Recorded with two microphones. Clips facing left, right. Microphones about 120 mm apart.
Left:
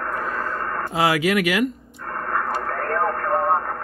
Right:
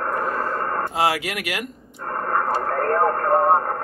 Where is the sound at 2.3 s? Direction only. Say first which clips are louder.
Right 3 dB; 30° right (ahead or behind).